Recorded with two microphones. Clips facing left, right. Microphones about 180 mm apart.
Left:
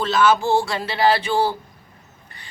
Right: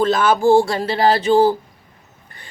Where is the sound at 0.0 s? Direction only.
50° right (ahead or behind).